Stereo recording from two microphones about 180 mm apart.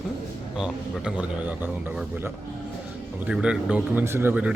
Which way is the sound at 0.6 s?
5° right (ahead or behind).